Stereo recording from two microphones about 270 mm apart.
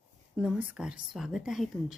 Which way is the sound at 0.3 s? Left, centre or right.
Centre.